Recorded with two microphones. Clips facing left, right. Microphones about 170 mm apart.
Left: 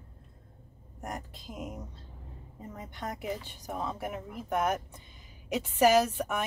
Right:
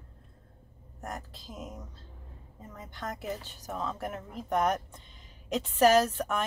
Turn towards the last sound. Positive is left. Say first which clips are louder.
# right 1 dB
turn(degrees=10)  # may be behind; listen again after turning